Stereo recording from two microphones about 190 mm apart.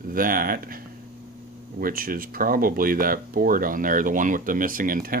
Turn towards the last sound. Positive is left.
turn(degrees=-50)  # may be behind; listen again after turning